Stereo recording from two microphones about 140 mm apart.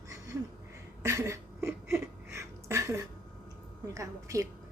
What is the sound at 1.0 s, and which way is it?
Speech, 20° right (ahead or behind).